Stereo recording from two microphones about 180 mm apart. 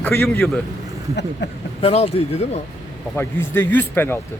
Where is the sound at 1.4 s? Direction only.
75° left (ahead or behind).